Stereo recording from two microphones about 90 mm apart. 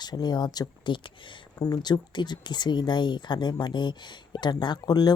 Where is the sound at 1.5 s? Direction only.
45° left (ahead or behind).